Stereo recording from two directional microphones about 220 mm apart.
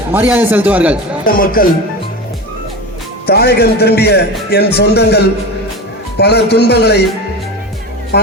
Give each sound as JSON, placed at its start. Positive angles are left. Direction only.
{"t": 0.1, "sound": "a man's voice", "side_deg": -10}
{"t": 1.2, "sound": "speech", "side_deg": 40}
{"t": 3.2, "sound": "a man's voice", "side_deg": 45}
{"t": 8.1, "sound": "a man's voice", "side_deg": 50}